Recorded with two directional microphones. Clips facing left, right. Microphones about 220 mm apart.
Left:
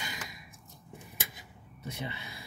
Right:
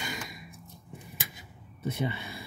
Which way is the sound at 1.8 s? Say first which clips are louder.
Right 8 dB; 55° right (ahead or behind).